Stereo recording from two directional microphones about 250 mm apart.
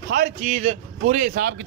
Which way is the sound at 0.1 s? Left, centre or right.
Right.